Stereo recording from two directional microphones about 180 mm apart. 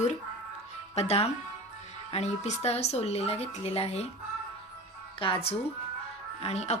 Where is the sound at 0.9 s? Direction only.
35° left (ahead or behind).